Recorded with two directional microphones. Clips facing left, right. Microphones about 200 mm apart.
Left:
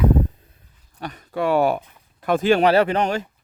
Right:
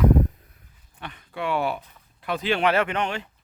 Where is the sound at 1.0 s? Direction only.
40° left (ahead or behind).